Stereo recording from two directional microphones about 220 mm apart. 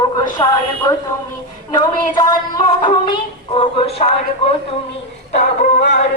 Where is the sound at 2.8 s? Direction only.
20° left (ahead or behind).